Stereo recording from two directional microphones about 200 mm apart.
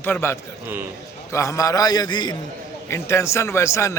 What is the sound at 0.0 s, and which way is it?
A man's voice, 10° left (ahead or behind).